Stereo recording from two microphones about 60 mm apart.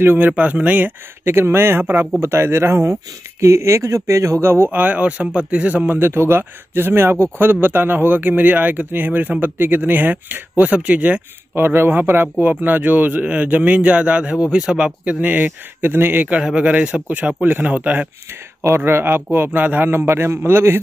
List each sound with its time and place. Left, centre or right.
0.0 s speech: right
0.3 s speech: right
4.6 s a man's voice: right
5.9 s speech: right
11.5 s speech: right
16.4 s a man's voice: centre
18.9 s speech: right
19.9 s speech: right